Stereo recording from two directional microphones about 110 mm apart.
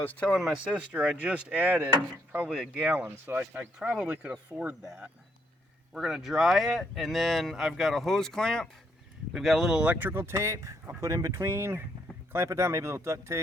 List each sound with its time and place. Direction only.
0.0 s speech: 15° left (ahead or behind)
0.3 s speech: centre (ahead or behind)
3.0 s speech: 15° right (ahead or behind)
5.9 s speech: 5° right (ahead or behind); by 13.4 s 25° right (ahead or behind)